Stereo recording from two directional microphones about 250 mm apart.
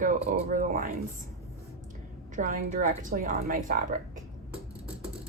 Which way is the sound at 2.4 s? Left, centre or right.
Right.